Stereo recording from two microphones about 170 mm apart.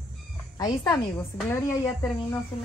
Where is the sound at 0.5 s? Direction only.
20° left (ahead or behind).